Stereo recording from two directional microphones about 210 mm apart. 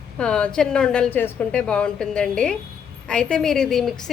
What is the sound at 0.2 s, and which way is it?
A woman's voice, 5° left (ahead or behind).